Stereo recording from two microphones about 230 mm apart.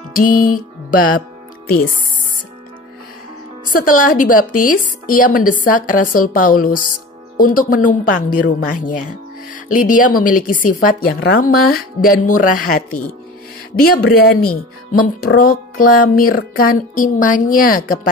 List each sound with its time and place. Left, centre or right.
0.1 s music: left
3.7 s speech: left